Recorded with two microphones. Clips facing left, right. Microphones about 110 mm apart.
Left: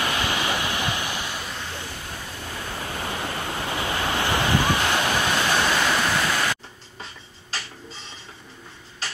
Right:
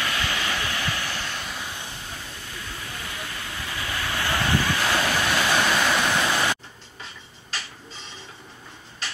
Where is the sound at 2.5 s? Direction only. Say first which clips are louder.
Left 6 dB; 55° left (ahead or behind); by 5.6 s 15° left (ahead or behind).